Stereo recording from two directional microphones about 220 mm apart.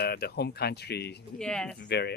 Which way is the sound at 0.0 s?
45° left (ahead or behind).